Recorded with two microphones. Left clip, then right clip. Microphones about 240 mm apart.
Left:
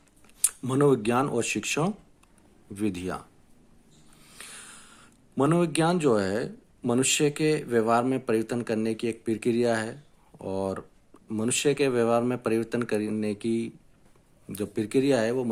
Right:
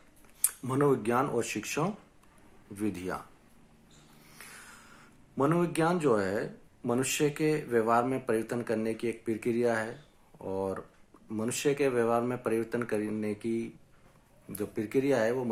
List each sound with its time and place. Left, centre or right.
0.6 s speech: left
4.4 s a sound: left
5.4 s speech: left
14.5 s speech: left